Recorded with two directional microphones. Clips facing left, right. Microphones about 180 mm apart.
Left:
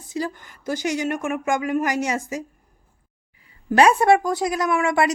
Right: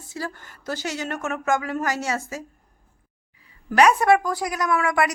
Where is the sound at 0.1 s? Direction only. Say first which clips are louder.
Left 5 dB; 15° left (ahead or behind).